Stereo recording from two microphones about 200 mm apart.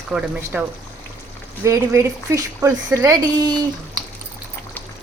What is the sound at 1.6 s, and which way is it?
Speech, 15° right (ahead or behind).